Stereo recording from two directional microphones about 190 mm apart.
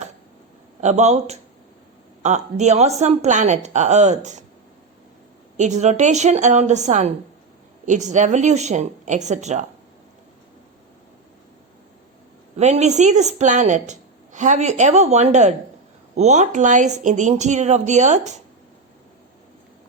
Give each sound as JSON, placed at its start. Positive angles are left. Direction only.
{"t": 0.8, "sound": "a woman's voice", "side_deg": -35}
{"t": 5.5, "sound": "a woman's voice", "side_deg": -40}
{"t": 12.5, "sound": "a woman's voice", "side_deg": -35}